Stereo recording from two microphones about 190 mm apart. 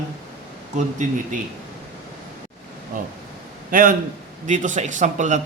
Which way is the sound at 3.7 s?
45° right (ahead or behind).